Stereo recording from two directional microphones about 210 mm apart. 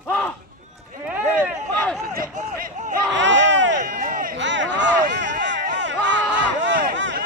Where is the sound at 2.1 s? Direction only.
40° right (ahead or behind).